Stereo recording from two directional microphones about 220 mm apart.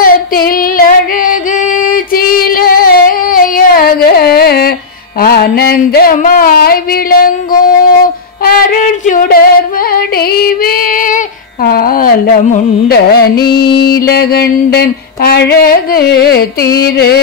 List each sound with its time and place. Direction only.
0.0 s female singing: 40° left (ahead or behind)
5.2 s a sound: 45° left (ahead or behind)
8.5 s female singing: 40° left (ahead or behind)
13.7 s mantra: 45° left (ahead or behind)